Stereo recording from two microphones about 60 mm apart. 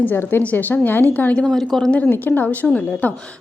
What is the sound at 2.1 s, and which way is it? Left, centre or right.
Speech, left.